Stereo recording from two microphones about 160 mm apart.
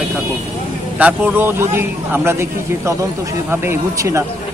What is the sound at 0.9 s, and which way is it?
Speech, 10° right (ahead or behind).